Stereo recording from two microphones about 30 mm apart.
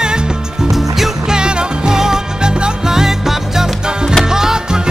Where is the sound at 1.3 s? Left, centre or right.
Right.